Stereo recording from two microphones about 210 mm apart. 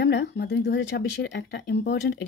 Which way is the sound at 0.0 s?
55° left (ahead or behind).